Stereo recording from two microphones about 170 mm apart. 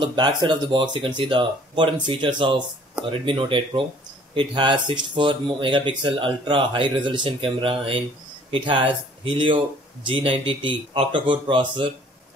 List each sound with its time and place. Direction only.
0.0 s speech: 25° right (ahead or behind)